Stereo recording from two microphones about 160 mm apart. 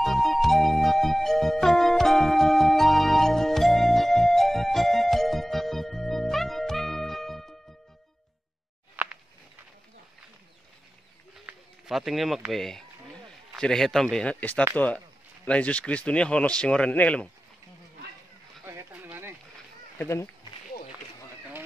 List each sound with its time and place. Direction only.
0.0 s music: centre (ahead or behind)
8.9 s a sound: 10° right (ahead or behind)
11.3 s bird: centre (ahead or behind)
13.5 s speech: 5° left (ahead or behind)
18.7 s a sound: 15° right (ahead or behind)
20.0 s speech: 15° left (ahead or behind)